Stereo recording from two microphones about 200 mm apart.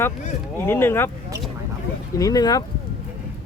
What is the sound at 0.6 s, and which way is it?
Speech, 10° left (ahead or behind).